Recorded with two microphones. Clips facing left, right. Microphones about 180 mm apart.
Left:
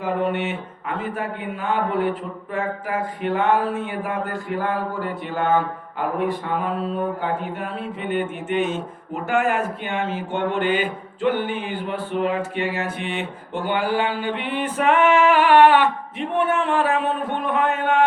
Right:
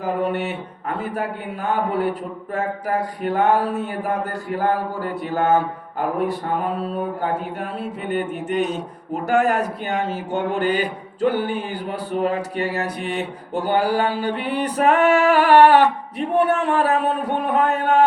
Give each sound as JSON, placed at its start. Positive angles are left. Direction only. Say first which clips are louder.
{"t": 0.0, "sound": "mantra", "louder": "even", "side_deg": -40}